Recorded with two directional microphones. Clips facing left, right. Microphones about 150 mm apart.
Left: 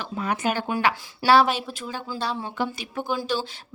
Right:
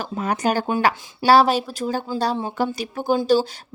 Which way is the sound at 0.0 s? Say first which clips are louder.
Right 4 dB; 40° right (ahead or behind).